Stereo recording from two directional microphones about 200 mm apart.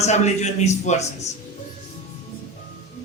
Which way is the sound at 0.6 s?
35° left (ahead or behind).